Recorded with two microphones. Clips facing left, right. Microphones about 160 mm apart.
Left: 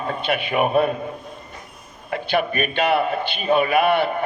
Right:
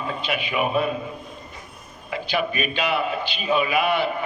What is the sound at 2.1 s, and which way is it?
A man's voice, 55° left (ahead or behind).